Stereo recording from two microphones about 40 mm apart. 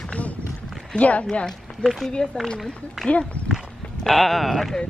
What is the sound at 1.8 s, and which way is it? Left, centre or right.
Speech, centre.